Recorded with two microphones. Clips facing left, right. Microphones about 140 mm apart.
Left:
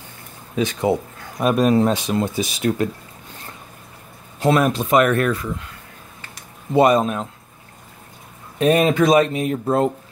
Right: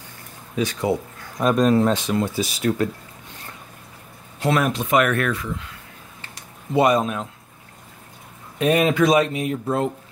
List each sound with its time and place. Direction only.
0.6 s speech: 20° left (ahead or behind)
1.4 s speech: 10° left (ahead or behind)
4.4 s speech: 35° left (ahead or behind)
6.7 s speech: 30° left (ahead or behind)
8.5 s speech: 35° left (ahead or behind)
9.1 s speech: 45° left (ahead or behind)